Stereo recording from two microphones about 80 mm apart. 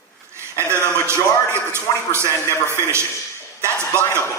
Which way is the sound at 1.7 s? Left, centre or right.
Right.